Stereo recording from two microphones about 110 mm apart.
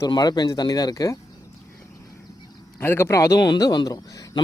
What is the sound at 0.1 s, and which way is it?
A man's voice, 40° left (ahead or behind).